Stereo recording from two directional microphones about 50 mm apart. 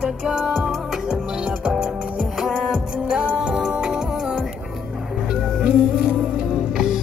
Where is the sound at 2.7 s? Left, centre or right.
Centre.